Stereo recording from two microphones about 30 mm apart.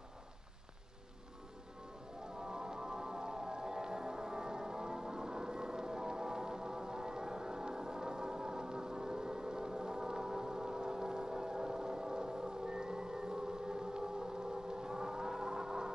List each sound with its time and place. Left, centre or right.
2.4 s music: right